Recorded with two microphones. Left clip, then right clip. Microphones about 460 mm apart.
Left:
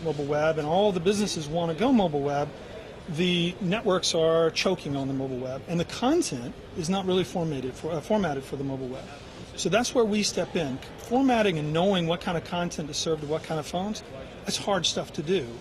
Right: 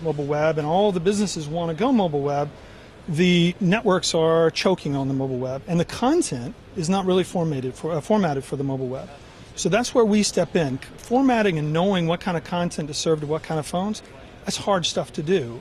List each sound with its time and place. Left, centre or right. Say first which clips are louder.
0.3 s speech: right 3 dB; right
9.6 s speech: right 4 dB; right